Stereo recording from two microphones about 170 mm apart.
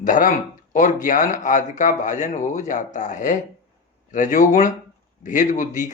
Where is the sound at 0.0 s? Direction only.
50° left (ahead or behind).